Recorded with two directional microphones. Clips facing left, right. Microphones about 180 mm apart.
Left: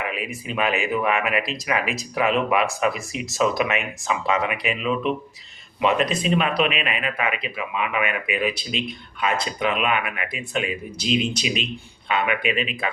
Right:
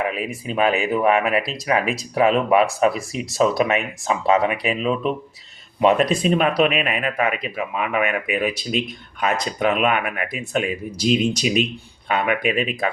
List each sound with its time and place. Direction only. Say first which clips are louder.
0.1 s speech: right 3 dB; 35° right (ahead or behind)